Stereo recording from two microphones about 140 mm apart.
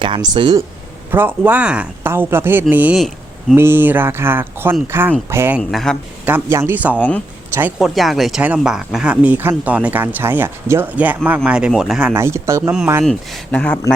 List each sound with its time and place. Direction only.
0.0 s speech: 30° right (ahead or behind)
1.1 s speech: 15° right (ahead or behind)
5.5 s speech: centre (ahead or behind)
6.2 s speech: 15° right (ahead or behind)
12.1 s speech: 20° right (ahead or behind)
13.1 s speech: 5° left (ahead or behind)